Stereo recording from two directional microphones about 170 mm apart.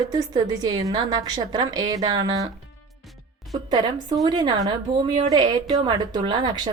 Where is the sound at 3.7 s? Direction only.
25° right (ahead or behind).